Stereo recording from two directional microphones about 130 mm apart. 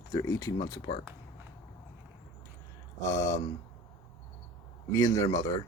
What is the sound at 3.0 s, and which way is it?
Speech, 25° left (ahead or behind).